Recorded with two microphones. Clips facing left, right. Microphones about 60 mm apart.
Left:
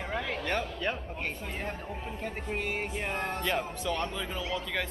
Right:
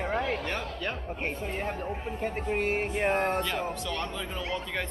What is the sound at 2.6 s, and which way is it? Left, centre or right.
Speech, right.